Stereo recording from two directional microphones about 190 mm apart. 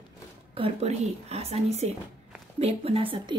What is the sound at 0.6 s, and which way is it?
Speech, 35° right (ahead or behind).